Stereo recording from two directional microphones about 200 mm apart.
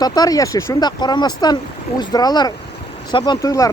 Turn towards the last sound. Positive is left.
turn(degrees=15)  # may be behind; listen again after turning